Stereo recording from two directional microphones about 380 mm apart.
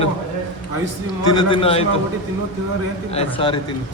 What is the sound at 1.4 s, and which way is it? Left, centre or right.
Speech, centre.